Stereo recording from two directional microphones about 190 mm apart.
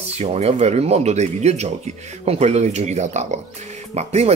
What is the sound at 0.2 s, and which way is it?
Speech, 30° right (ahead or behind).